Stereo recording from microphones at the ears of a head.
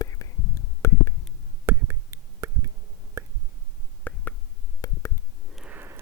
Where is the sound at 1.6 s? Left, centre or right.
Right.